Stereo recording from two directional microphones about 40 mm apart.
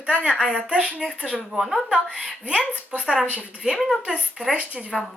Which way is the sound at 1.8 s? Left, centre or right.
Right.